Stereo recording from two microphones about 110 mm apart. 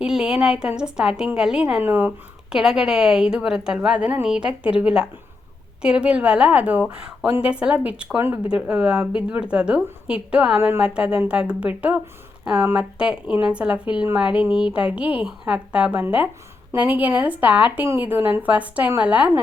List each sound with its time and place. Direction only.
0.0 s a woman's voice: 5° right (ahead or behind)
10.6 s a woman's voice: 20° right (ahead or behind)